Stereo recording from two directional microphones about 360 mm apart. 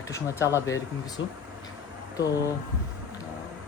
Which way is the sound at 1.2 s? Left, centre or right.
Left.